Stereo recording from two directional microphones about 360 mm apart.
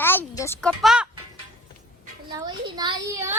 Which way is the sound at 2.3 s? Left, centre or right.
Centre.